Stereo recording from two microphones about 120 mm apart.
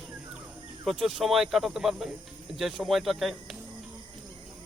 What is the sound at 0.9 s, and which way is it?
Speech, centre (ahead or behind).